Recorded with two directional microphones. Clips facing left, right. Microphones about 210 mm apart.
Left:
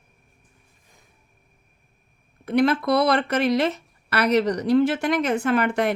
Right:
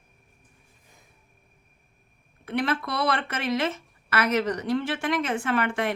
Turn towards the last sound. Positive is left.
turn(degrees=40)  # may be behind; listen again after turning